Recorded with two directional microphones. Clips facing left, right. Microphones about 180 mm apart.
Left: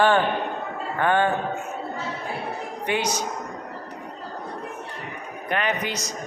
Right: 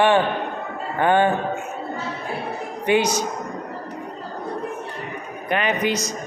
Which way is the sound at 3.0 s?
10° right (ahead or behind).